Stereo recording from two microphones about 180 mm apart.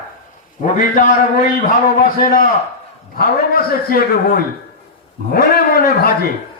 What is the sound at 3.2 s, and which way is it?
A man's voice, 55° left (ahead or behind).